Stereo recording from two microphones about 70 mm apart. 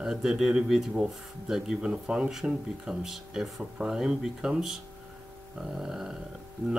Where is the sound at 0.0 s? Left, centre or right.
Centre.